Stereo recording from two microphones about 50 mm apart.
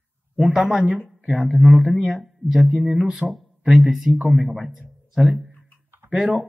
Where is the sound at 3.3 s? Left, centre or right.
Centre.